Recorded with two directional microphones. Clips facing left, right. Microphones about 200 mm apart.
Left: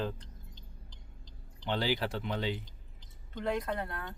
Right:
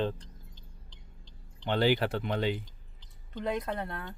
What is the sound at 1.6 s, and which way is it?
Speech, 60° right (ahead or behind).